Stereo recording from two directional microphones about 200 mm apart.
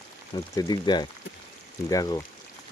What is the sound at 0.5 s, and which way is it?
Speech, 20° left (ahead or behind).